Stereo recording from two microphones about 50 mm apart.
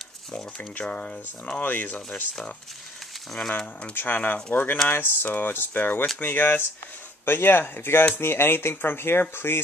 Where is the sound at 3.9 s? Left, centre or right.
Left.